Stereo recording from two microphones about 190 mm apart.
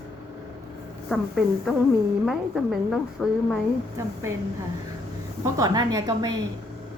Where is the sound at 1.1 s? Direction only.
Centre (ahead or behind).